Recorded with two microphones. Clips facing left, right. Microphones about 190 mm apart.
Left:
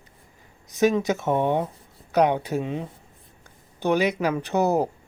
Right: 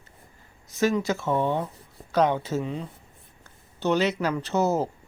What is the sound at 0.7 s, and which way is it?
Speech, 15° left (ahead or behind).